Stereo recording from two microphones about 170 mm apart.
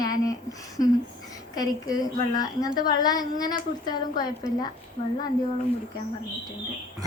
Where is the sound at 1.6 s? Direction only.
20° left (ahead or behind).